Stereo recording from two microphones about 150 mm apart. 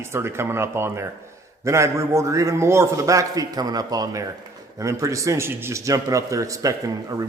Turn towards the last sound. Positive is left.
turn(degrees=-20)  # may be behind; listen again after turning